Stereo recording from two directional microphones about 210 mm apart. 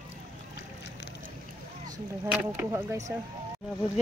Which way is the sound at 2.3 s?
10° right (ahead or behind).